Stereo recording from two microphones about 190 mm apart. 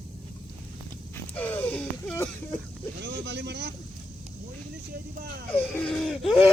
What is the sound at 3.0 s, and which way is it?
Boat, 65° right (ahead or behind).